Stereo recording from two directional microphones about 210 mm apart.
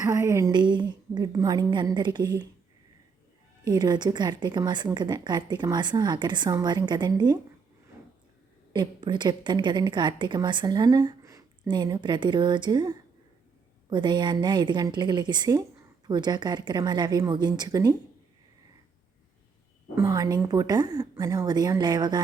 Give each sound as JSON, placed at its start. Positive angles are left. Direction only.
{"t": 0.0, "sound": "a woman's voice", "side_deg": -15}
{"t": 3.7, "sound": "a woman's voice", "side_deg": -20}
{"t": 8.7, "sound": "a woman's voice", "side_deg": -20}
{"t": 20.0, "sound": "a woman's voice", "side_deg": -15}